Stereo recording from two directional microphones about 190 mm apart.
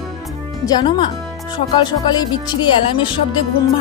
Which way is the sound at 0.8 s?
25° left (ahead or behind).